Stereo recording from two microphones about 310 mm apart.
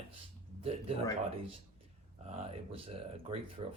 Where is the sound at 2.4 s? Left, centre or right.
Centre.